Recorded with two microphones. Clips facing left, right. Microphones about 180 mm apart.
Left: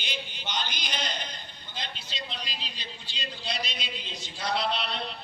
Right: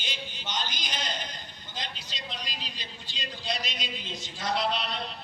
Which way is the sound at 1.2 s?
45° right (ahead or behind).